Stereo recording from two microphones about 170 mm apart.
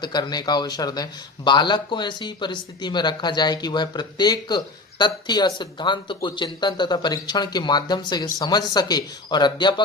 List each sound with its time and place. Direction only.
0.0 s speech: 25° left (ahead or behind)